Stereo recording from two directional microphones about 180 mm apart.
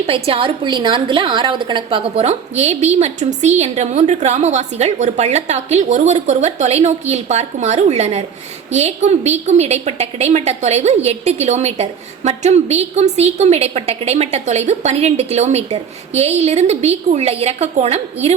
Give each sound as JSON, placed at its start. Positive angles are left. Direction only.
{"t": 0.1, "sound": "a woman's voice", "side_deg": -30}